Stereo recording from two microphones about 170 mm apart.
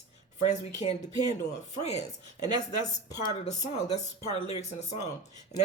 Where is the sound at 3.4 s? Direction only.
40° left (ahead or behind).